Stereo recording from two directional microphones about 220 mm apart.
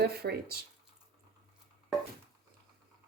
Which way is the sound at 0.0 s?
45° right (ahead or behind).